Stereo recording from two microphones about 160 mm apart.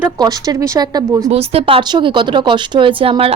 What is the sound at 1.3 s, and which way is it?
Speech, 40° right (ahead or behind).